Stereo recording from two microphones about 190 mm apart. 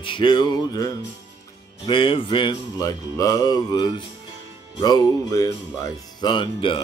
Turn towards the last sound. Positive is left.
turn(degrees=25)  # may be behind; listen again after turning